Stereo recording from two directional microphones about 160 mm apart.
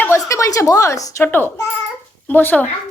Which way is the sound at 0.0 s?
15° left (ahead or behind).